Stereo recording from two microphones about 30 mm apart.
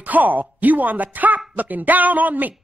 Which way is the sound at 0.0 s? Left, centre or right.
Right.